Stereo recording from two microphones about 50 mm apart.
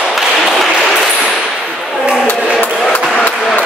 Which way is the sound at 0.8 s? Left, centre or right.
Centre.